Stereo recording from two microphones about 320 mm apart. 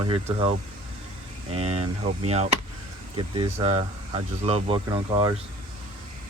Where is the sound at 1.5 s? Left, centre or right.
Centre.